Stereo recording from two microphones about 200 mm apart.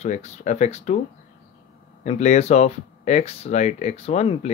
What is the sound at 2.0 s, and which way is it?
Speech, 35° left (ahead or behind).